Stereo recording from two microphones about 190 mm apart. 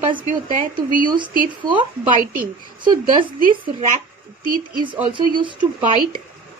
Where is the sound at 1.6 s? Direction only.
25° right (ahead or behind).